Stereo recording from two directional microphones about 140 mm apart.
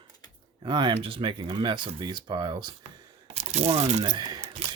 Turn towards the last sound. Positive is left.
turn(degrees=-35)  # may be behind; listen again after turning